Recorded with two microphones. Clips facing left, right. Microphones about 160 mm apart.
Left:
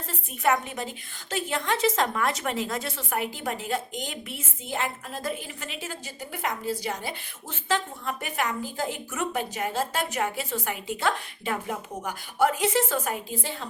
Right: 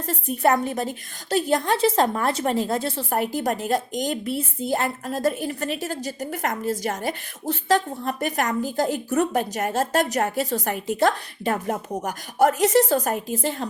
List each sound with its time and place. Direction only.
0.0 s a woman's voice: 40° right (ahead or behind)